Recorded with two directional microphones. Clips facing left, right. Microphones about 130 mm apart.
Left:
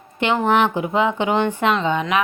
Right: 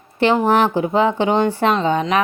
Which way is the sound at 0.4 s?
35° right (ahead or behind).